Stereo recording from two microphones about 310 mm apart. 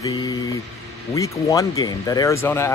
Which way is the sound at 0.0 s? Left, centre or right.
Centre.